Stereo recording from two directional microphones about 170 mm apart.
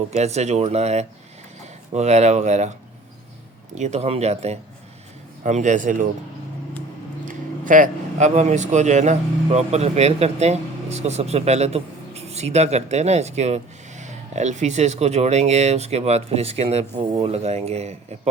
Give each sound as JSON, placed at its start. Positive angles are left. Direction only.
{"t": 0.1, "sound": "speech", "side_deg": -40}
{"t": 3.8, "sound": "speech", "side_deg": -40}
{"t": 7.3, "sound": "speech", "side_deg": -50}